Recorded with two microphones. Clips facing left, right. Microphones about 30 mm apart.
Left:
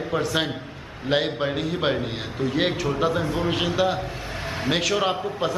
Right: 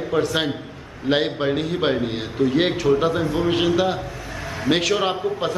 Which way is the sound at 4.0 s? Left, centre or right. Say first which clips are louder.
Even; left.